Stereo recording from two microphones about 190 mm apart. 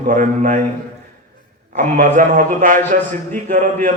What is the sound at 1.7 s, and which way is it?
A man's voice, 40° right (ahead or behind).